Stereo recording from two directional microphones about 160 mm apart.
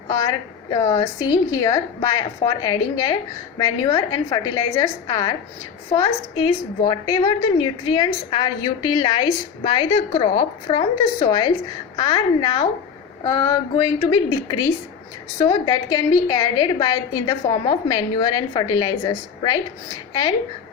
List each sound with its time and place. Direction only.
0.1 s a woman's voice: 25° left (ahead or behind)